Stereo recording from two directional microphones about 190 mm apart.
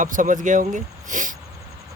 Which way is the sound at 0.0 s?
45° right (ahead or behind).